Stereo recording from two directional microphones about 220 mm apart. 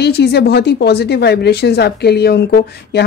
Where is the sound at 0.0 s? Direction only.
50° left (ahead or behind).